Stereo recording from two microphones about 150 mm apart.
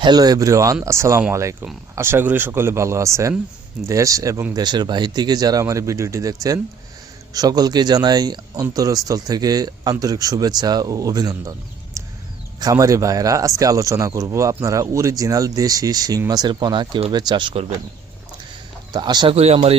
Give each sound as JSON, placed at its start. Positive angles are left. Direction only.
{"t": 0.0, "sound": "speech", "side_deg": -25}
{"t": 12.0, "sound": "a sound", "side_deg": -20}
{"t": 12.5, "sound": "speech", "side_deg": -25}
{"t": 18.9, "sound": "speech", "side_deg": -30}
{"t": 19.4, "sound": "speech", "side_deg": -45}